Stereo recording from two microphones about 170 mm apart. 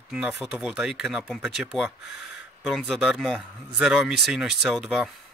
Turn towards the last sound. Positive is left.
turn(degrees=0)  # may be behind; listen again after turning